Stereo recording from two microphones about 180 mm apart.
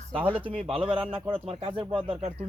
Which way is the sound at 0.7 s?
30° right (ahead or behind).